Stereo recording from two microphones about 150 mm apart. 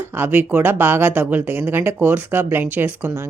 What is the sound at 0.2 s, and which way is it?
Speech, 10° right (ahead or behind).